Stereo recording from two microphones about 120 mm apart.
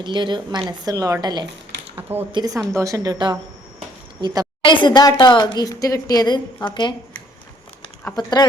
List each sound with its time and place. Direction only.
0.0 s a woman's voice: 40° right (ahead or behind)
2.0 s speech: 15° right (ahead or behind)
2.3 s a woman's voice: 30° right (ahead or behind)
4.6 s speech: 40° left (ahead or behind)
8.1 s speech: 35° left (ahead or behind)